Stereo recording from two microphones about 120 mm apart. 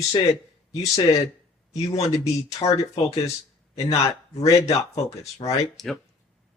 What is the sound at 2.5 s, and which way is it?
Speech, 60° left (ahead or behind).